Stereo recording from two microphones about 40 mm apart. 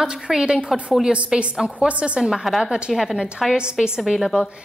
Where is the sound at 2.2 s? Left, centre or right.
Centre.